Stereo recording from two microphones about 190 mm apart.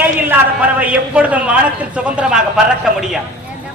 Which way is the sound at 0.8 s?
10° right (ahead or behind).